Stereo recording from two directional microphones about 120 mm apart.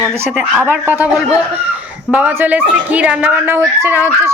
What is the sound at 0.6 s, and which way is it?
A man's voice, 15° right (ahead or behind).